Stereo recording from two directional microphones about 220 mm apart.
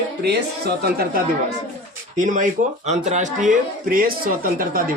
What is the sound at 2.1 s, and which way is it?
Speech, 35° right (ahead or behind).